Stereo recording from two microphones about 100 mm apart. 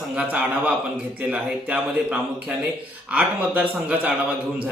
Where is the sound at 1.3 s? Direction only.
10° right (ahead or behind).